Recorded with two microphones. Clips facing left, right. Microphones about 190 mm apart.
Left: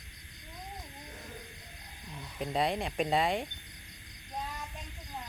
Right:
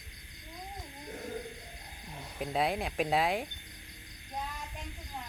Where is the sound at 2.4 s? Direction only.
5° right (ahead or behind).